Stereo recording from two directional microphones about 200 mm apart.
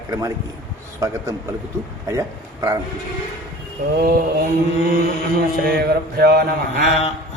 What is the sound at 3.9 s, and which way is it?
Mantra, 45° right (ahead or behind).